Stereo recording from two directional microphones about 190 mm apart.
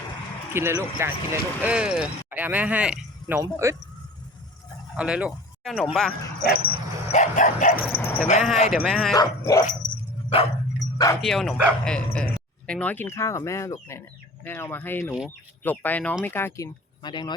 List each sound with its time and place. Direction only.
0.5 s speech: 15° right (ahead or behind)
4.9 s speech: 5° right (ahead or behind)
6.7 s dog: 40° left (ahead or behind)
7.9 s speech: 10° left (ahead or behind)
8.7 s speech: centre (ahead or behind)
9.1 s speech: 20° left (ahead or behind)
10.2 s dog: 30° left (ahead or behind)
10.9 s speech: 15° left (ahead or behind)
11.2 s speech: centre (ahead or behind); by 17.3 s 25° left (ahead or behind)